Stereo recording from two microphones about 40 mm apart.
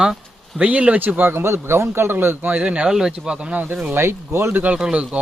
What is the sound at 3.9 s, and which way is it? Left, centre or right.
Speech, right.